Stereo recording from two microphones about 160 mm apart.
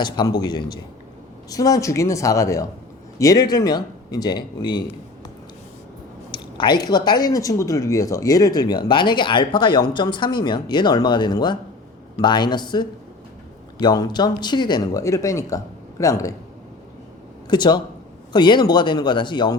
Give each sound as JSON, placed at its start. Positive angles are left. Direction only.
{"t": 0.0, "sound": "speech", "side_deg": 25}
{"t": 6.3, "sound": "speech", "side_deg": 30}
{"t": 17.5, "sound": "speech", "side_deg": 25}